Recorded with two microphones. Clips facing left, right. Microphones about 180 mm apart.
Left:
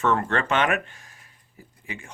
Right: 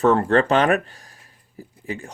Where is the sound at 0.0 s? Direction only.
35° right (ahead or behind).